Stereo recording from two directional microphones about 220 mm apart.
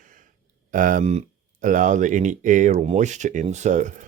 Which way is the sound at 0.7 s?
35° right (ahead or behind).